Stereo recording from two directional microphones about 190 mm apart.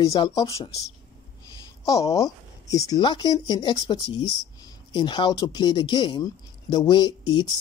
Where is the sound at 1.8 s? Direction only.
15° left (ahead or behind).